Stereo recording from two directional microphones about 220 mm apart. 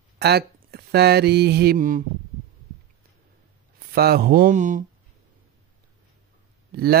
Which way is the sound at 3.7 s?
45° right (ahead or behind).